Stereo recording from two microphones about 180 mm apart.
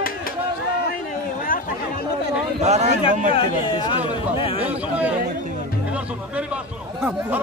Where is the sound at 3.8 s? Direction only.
30° left (ahead or behind).